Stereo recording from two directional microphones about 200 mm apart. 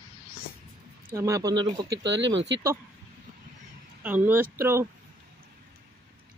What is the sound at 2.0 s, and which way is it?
Speech, 65° right (ahead or behind).